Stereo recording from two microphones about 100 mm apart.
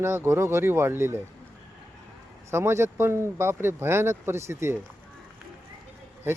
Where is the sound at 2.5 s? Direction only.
25° right (ahead or behind).